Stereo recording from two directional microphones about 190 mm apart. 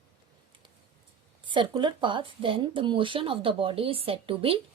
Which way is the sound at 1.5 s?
25° right (ahead or behind).